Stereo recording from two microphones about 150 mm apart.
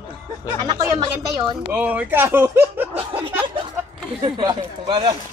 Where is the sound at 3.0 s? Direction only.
40° right (ahead or behind).